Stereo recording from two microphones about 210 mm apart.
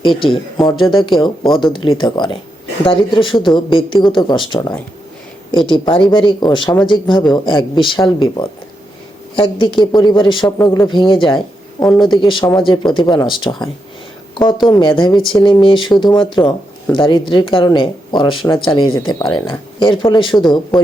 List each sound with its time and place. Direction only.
0.3 s speech: centre (ahead or behind)
0.8 s speech: 25° left (ahead or behind)
11.3 s speech: 5° left (ahead or behind)
12.0 s speech: 25° left (ahead or behind)
14.7 s speech: 25° left (ahead or behind)
16.9 s speech: 25° left (ahead or behind)